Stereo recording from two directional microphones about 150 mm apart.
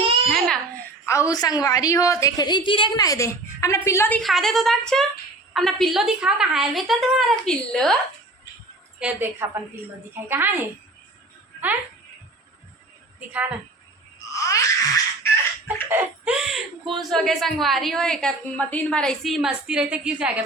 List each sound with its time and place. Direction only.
0.3 s babbling: centre (ahead or behind)
1.0 s a woman's voice: 20° left (ahead or behind)
4.2 s speech: centre (ahead or behind)
9.0 s a woman's voice: 10° right (ahead or behind)
14.3 s a sound: 20° left (ahead or behind)
15.9 s speech: 10° right (ahead or behind)